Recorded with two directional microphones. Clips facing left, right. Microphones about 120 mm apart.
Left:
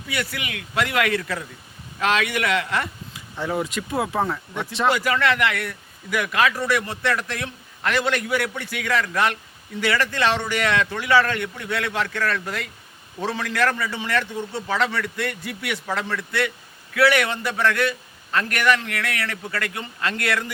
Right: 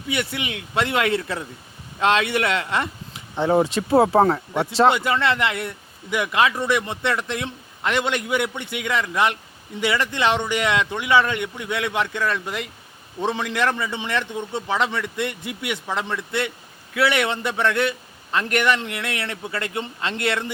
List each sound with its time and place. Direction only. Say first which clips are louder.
0.1 s speech: right 3 dB; 25° right (ahead or behind)